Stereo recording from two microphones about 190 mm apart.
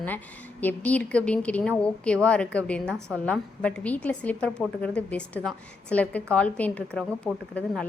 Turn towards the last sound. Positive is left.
turn(degrees=0)  # may be behind; listen again after turning